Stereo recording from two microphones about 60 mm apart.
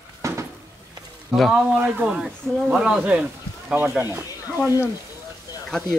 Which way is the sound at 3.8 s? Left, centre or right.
Right.